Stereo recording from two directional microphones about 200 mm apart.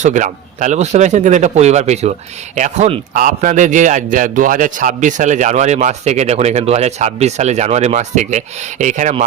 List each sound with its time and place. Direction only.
0.0 s speech: 40° right (ahead or behind)